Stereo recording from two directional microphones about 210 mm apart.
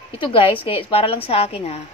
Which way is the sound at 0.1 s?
25° left (ahead or behind).